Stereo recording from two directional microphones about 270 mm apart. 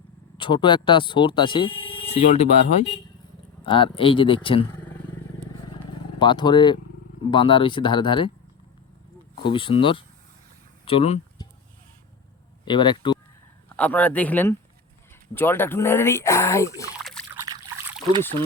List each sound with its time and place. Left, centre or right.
0.3 s speech: centre
5.7 s vehicle: centre
7.3 s speech: centre
9.4 s speech: centre
10.8 s a sound: left
12.6 s speech: centre
13.7 s speech: centre
17.0 s trickle: centre
17.5 s trickle: centre